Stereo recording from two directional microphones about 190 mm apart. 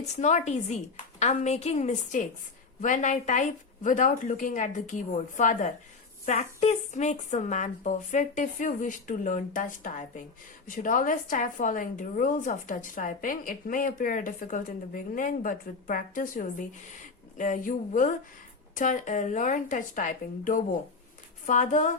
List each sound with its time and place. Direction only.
0.0 s a woman's voice: 40° left (ahead or behind)